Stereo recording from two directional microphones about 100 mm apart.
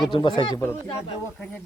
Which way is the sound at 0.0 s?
50° left (ahead or behind).